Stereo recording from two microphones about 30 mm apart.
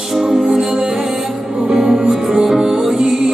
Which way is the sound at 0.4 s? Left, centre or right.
Right.